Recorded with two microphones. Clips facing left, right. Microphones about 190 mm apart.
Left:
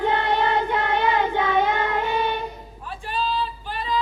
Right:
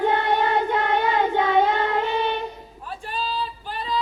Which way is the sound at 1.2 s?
25° right (ahead or behind).